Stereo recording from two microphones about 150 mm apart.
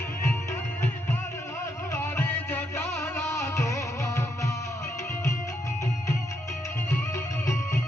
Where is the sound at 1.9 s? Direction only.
15° left (ahead or behind).